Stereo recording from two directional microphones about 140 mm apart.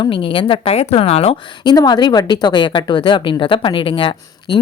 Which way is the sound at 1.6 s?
30° left (ahead or behind).